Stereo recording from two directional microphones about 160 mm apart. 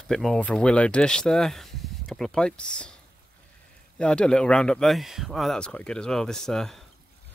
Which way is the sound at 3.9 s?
5° left (ahead or behind).